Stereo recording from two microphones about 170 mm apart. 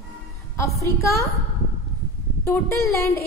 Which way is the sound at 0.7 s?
15° left (ahead or behind).